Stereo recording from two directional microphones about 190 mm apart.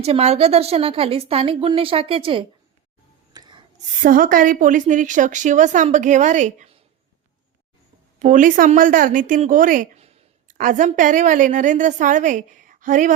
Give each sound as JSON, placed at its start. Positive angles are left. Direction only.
{"t": 0.0, "sound": "a woman's voice", "side_deg": -35}
{"t": 3.3, "sound": "rub", "side_deg": -25}
{"t": 4.0, "sound": "a woman's voice", "side_deg": -45}
{"t": 8.2, "sound": "a woman's voice", "side_deg": -45}